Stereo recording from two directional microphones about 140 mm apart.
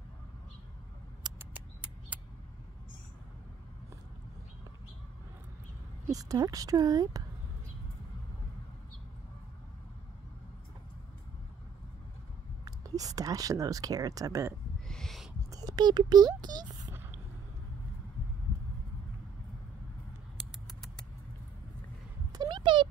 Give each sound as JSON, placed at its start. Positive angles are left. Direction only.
{"t": 1.4, "sound": "mouse", "side_deg": -10}
{"t": 6.1, "sound": "speech", "side_deg": -25}
{"t": 12.6, "sound": "speech", "side_deg": -25}
{"t": 14.9, "sound": "owl", "side_deg": 5}
{"t": 15.5, "sound": "speech", "side_deg": -30}
{"t": 22.3, "sound": "a sound", "side_deg": -30}